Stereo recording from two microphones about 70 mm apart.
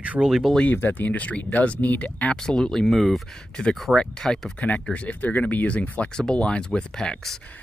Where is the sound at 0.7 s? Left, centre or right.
Left.